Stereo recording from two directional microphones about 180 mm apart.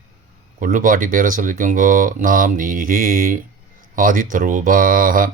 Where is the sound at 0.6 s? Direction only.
50° right (ahead or behind).